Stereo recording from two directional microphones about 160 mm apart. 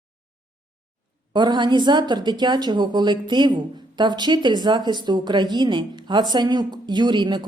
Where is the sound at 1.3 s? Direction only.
30° right (ahead or behind).